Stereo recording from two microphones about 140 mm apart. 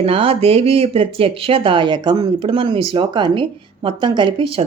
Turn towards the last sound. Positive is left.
turn(degrees=-35)  # may be behind; listen again after turning